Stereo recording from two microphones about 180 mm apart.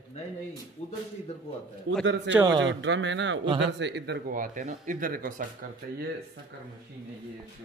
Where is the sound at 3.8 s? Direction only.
70° right (ahead or behind).